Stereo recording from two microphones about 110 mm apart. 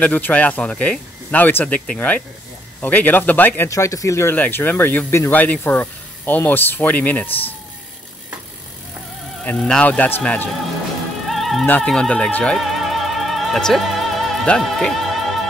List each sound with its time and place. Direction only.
0.0 s speech: 15° left (ahead or behind)
3.7 s speech: 30° left (ahead or behind); by 7.5 s 15° left (ahead or behind)
9.4 s speech: 10° left (ahead or behind)
11.2 s music: centre (ahead or behind)
11.8 s speech: 5° left (ahead or behind)
12.5 s music: centre (ahead or behind)